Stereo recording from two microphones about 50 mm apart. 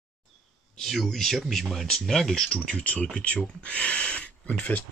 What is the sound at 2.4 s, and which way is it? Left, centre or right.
Speech, centre.